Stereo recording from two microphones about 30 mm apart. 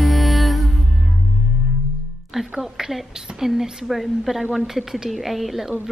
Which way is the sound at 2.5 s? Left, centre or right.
Centre.